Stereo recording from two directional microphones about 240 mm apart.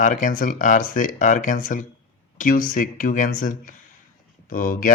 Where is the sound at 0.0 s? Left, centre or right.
Left.